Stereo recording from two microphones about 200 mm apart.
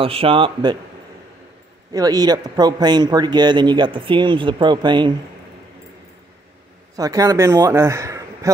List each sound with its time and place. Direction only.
0.0 s a man's voice: 30° right (ahead or behind)
1.9 s a man's voice: 20° right (ahead or behind)
7.0 s a man's voice: 15° right (ahead or behind)